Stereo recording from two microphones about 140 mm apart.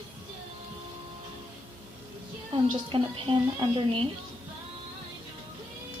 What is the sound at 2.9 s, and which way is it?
Speech, 35° right (ahead or behind).